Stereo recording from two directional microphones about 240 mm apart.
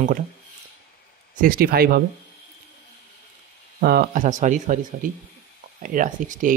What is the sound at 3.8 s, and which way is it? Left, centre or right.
Speech, right.